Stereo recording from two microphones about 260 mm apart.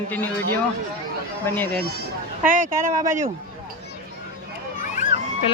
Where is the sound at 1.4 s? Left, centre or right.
Centre.